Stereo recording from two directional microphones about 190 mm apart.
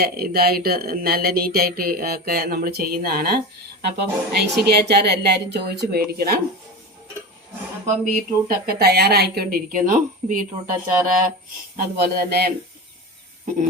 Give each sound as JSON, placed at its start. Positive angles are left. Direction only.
{"t": 0.0, "sound": "speech", "side_deg": -55}
{"t": 8.0, "sound": "speech", "side_deg": -50}